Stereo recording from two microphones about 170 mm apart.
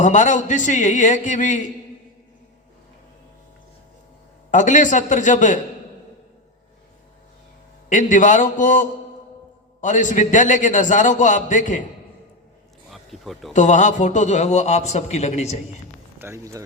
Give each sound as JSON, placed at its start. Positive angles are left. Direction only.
{"t": 0.0, "sound": "a man's voice", "side_deg": 45}
{"t": 4.5, "sound": "a man's voice", "side_deg": 45}
{"t": 7.9, "sound": "a man's voice", "side_deg": 50}
{"t": 12.9, "sound": "a sound", "side_deg": 0}
{"t": 13.5, "sound": "a man's voice", "side_deg": 45}
{"t": 16.1, "sound": "speech", "side_deg": -15}